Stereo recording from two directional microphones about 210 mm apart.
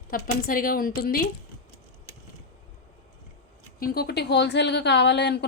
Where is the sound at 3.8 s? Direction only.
45° left (ahead or behind).